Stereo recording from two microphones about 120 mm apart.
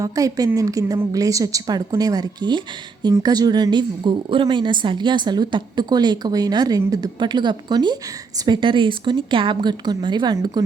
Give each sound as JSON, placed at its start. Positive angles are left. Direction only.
{"t": 0.0, "sound": "a woman's voice", "side_deg": -30}